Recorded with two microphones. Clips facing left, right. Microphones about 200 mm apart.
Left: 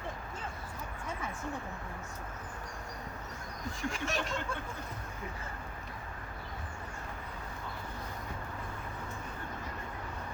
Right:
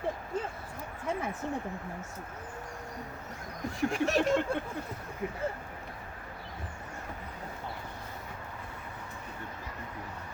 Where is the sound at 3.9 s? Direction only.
60° right (ahead or behind).